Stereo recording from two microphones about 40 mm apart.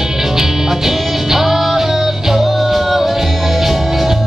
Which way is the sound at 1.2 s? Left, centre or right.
Centre.